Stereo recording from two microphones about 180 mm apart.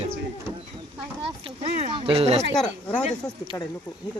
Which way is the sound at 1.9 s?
30° right (ahead or behind).